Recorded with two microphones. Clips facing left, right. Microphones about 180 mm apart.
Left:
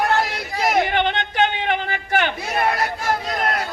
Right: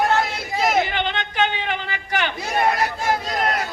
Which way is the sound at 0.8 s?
55° left (ahead or behind).